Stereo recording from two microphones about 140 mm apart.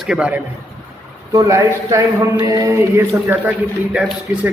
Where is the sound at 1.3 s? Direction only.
20° right (ahead or behind).